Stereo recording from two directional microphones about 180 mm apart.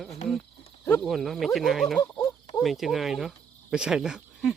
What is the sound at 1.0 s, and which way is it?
Speech, centre (ahead or behind).